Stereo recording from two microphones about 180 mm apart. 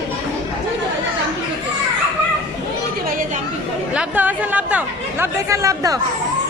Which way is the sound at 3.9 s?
10° right (ahead or behind).